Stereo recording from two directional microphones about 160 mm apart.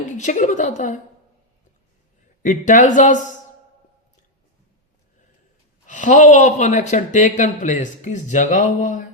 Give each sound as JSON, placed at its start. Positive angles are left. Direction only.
{"t": 0.0, "sound": "a woman's voice", "side_deg": 50}
{"t": 2.4, "sound": "speech", "side_deg": 50}
{"t": 5.8, "sound": "speech", "side_deg": 50}